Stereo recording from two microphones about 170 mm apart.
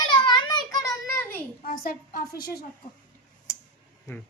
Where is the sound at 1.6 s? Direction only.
60° left (ahead or behind).